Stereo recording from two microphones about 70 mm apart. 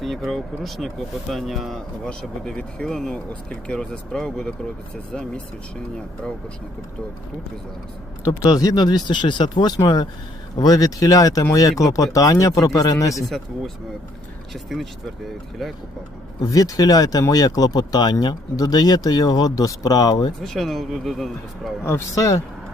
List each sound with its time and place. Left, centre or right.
0.0 s speech: centre
2.0 s speech: centre
8.4 s speech: left
10.6 s speech: left
14.5 s speech: centre
16.5 s speech: left
20.4 s speech: centre
22.1 s speech: left